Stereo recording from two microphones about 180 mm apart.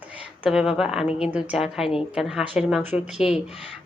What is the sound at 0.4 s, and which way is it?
A woman's voice, 5° right (ahead or behind).